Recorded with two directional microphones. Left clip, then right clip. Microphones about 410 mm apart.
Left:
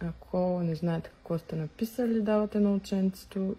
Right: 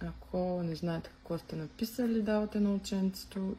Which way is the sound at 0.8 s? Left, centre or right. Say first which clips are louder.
Left 4 dB; centre.